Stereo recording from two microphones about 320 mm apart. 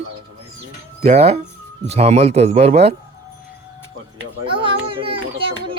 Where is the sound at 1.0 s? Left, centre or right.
Centre.